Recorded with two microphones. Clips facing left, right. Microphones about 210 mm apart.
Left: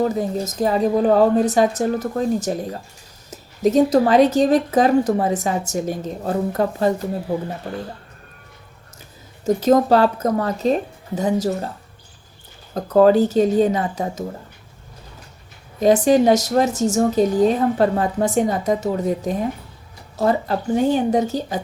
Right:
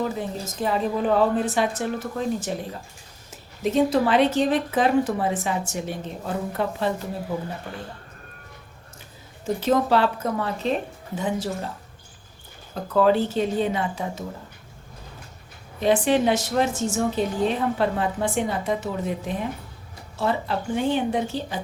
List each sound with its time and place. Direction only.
0.0 s speech: 40° left (ahead or behind)
9.6 s speech: 40° left (ahead or behind)
12.7 s speech: 40° left (ahead or behind)
15.8 s speech: 40° left (ahead or behind)